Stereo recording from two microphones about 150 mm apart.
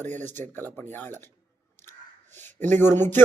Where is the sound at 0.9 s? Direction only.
15° left (ahead or behind).